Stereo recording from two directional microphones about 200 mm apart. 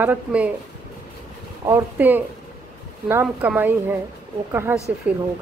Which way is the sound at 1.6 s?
10° right (ahead or behind).